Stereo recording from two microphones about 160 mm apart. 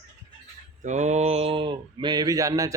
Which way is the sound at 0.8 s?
45° right (ahead or behind).